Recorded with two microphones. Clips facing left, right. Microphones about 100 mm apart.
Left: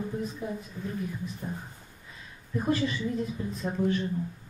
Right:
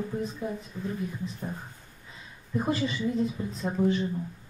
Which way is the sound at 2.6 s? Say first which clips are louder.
Even; 20° right (ahead or behind).